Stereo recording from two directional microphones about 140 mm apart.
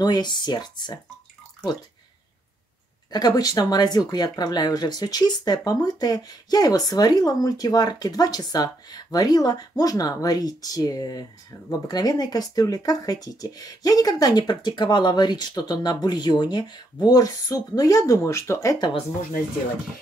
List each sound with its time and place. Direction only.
0.0 s speech: 30° left (ahead or behind)
3.1 s speech: 30° left (ahead or behind)